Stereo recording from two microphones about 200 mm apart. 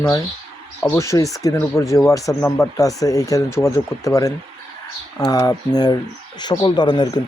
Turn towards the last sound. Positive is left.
turn(degrees=20)  # may be behind; listen again after turning